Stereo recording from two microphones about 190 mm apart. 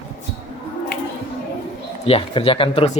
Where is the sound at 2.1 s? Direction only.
30° left (ahead or behind).